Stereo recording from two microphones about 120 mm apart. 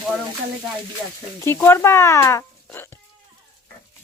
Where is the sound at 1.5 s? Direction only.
20° left (ahead or behind).